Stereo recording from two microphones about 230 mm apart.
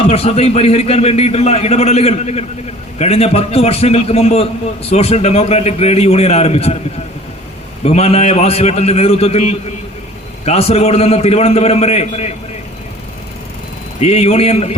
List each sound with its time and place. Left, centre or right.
0.0 s a man's voice: left
7.9 s a man's voice: left
14.0 s a man's voice: left